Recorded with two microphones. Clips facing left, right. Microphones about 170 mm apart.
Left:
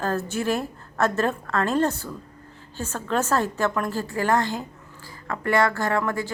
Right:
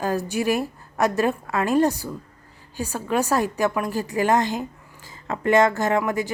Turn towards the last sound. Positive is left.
turn(degrees=-20)  # may be behind; listen again after turning